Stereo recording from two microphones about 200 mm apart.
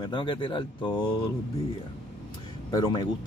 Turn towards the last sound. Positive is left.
turn(degrees=20)  # may be behind; listen again after turning